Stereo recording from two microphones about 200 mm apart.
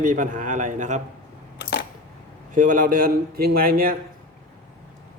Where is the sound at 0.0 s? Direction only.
40° right (ahead or behind).